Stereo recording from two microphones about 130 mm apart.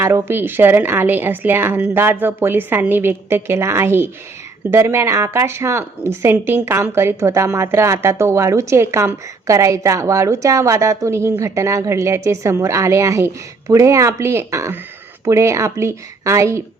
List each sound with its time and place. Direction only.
0.0 s a woman's voice: 20° right (ahead or behind)